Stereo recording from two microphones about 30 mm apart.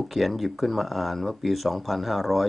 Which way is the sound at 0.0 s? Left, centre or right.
Centre.